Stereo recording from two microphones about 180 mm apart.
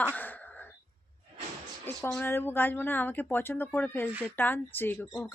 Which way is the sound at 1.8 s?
15° left (ahead or behind).